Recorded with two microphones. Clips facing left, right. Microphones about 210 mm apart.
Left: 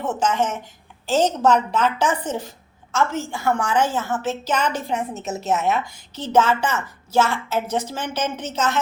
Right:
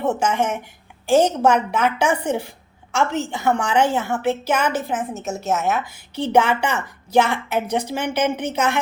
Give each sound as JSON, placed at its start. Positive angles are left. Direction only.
{"t": 0.0, "sound": "a woman's voice", "side_deg": -10}